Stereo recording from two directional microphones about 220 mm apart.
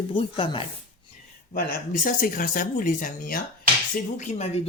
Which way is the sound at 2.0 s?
40° left (ahead or behind).